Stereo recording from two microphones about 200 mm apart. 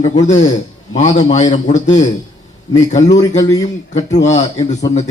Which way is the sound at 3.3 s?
15° left (ahead or behind).